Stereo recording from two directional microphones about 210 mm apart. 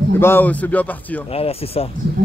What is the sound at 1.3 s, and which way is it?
Speech, 30° left (ahead or behind).